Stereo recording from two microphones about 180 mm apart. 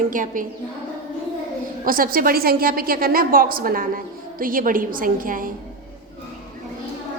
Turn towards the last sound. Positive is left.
turn(degrees=-50)  # may be behind; listen again after turning